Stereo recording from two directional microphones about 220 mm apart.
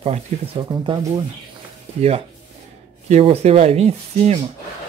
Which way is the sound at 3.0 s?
30° right (ahead or behind).